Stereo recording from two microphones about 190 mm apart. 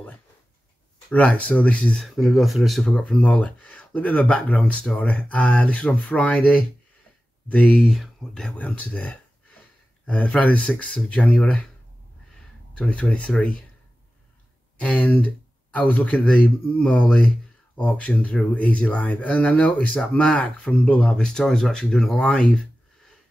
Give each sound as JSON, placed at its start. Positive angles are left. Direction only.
{"t": 1.1, "sound": "speech", "side_deg": 5}
{"t": 14.8, "sound": "speech", "side_deg": 10}